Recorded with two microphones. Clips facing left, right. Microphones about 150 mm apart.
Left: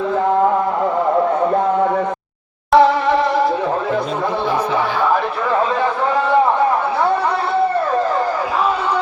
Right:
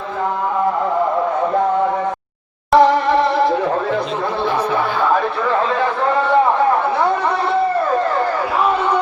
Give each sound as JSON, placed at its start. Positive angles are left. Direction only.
{"t": 2.7, "sound": "music", "side_deg": 5}